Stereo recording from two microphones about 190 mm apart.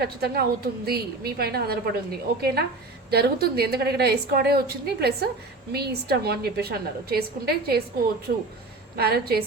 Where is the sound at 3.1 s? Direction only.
55° right (ahead or behind).